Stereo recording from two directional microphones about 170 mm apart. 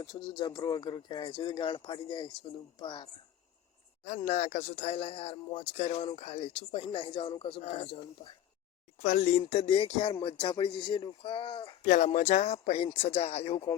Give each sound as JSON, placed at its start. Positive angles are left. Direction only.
{"t": 0.0, "sound": "speech", "side_deg": 25}
{"t": 4.3, "sound": "speech", "side_deg": 40}
{"t": 9.0, "sound": "speech", "side_deg": 45}
{"t": 11.9, "sound": "speech", "side_deg": 45}